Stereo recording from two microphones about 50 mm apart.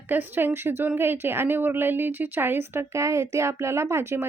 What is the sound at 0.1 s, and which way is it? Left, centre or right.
A woman's voice, right.